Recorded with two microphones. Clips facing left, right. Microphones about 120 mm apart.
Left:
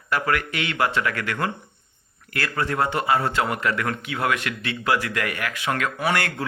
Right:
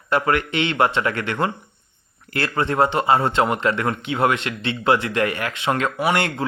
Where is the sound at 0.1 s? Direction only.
25° right (ahead or behind).